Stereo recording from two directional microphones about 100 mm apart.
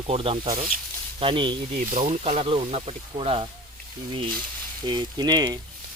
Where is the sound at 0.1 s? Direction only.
80° right.